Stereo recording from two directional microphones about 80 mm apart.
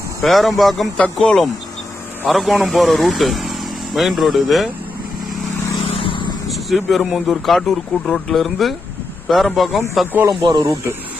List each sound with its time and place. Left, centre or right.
0.2 s speech: centre
0.9 s speech: centre
6.0 s vehicle: left
6.5 s speech: centre
10.2 s speech: right